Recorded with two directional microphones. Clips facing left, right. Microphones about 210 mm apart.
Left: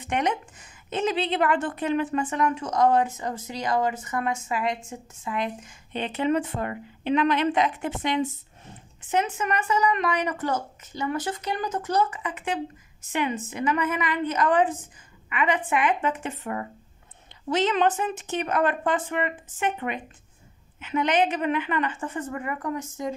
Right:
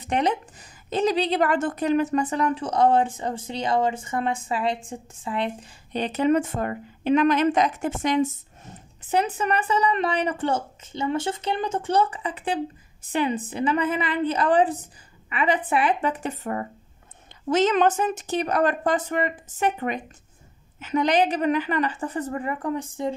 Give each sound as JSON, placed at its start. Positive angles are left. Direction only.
{"t": 0.0, "sound": "a woman's voice", "side_deg": -35}